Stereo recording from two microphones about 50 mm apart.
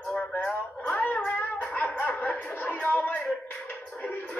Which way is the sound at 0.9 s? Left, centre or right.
Left.